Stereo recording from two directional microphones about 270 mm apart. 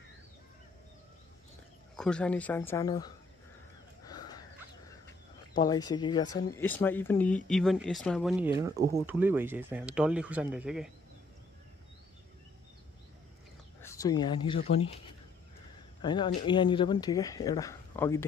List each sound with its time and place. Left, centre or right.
2.0 s speech: centre
4.0 s dog: centre
5.6 s speech: centre
13.7 s speech: centre